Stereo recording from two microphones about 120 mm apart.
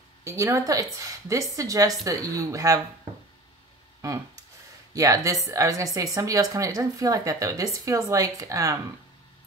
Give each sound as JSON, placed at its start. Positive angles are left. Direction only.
{"t": 0.2, "sound": "a woman's voice", "side_deg": -25}
{"t": 4.0, "sound": "a woman's voice", "side_deg": -25}